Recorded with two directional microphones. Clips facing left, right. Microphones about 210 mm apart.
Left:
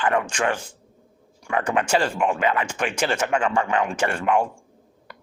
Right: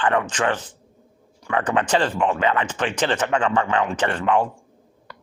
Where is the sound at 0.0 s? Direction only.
10° left (ahead or behind).